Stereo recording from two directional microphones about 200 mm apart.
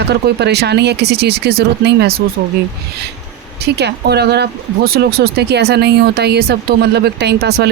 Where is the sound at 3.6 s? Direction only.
55° right (ahead or behind).